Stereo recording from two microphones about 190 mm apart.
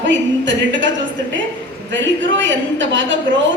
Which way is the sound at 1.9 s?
80° right.